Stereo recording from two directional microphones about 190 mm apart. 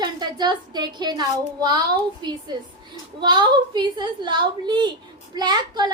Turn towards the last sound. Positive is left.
turn(degrees=-20)  # may be behind; listen again after turning